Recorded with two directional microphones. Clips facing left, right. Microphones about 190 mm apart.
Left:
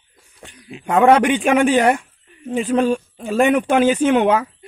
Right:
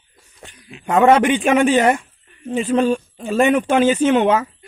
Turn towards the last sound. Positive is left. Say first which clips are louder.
# even
turn(degrees=10)  # may be behind; listen again after turning